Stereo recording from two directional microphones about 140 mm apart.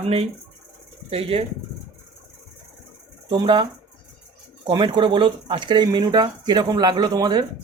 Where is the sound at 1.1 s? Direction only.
45° right (ahead or behind).